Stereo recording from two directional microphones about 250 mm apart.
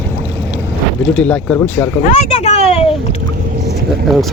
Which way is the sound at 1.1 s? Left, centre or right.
Centre.